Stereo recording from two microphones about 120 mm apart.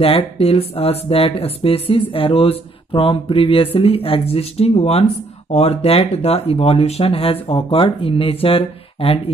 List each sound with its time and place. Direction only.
0.0 s speech: 55° left (ahead or behind)